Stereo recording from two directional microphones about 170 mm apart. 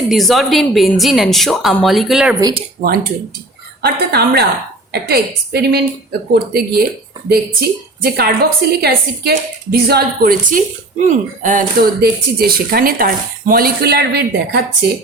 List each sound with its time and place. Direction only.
0.1 s speech: centre (ahead or behind)
2.4 s speech: 30° right (ahead or behind)
2.8 s speech: 60° right (ahead or behind)
3.8 s a woman's voice: 70° right (ahead or behind)
8.0 s a woman's voice: 70° right (ahead or behind)